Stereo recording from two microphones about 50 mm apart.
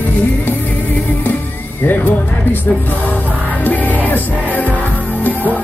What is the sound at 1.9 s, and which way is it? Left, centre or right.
Music, left.